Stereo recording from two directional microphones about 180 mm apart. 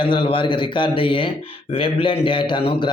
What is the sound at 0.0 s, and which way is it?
A man's voice, 25° left (ahead or behind).